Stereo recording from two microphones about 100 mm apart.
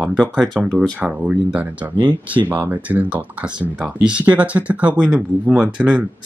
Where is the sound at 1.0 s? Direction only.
10° right (ahead or behind).